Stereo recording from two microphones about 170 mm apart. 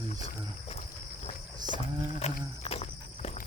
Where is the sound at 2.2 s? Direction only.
40° left (ahead or behind).